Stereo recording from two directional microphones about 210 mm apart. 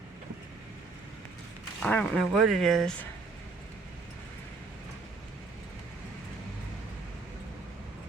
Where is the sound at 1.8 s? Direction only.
5° left (ahead or behind).